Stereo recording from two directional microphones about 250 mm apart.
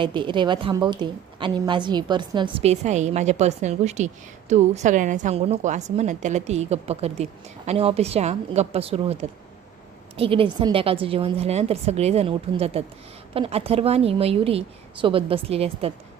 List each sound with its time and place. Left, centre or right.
0.0 s a woman's voice: centre
10.2 s a woman's voice: right